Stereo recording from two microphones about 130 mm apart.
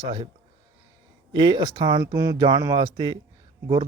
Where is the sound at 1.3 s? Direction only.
35° right (ahead or behind).